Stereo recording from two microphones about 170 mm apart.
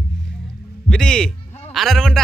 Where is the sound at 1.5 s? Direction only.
40° left (ahead or behind).